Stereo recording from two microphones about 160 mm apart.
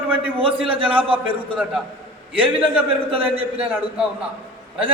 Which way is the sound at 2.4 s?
10° right (ahead or behind).